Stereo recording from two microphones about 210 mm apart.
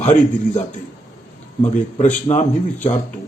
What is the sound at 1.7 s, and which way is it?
A man's voice, 35° left (ahead or behind).